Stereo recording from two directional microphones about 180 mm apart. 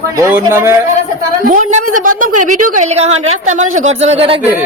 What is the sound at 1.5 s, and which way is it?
A woman's voice, 50° right (ahead or behind).